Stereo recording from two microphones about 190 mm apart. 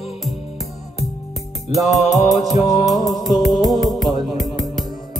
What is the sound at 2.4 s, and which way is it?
Music, centre (ahead or behind).